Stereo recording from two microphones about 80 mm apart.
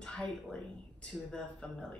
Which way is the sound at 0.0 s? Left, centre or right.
Centre.